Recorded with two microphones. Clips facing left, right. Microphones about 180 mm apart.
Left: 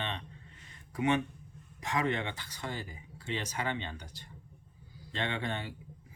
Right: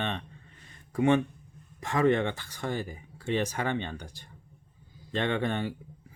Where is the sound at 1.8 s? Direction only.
50° right (ahead or behind).